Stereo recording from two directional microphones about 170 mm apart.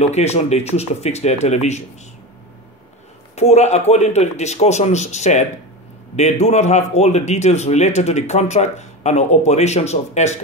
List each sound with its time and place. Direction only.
0.0 s a man's voice: 40° left (ahead or behind)
3.3 s a man's voice: 40° left (ahead or behind)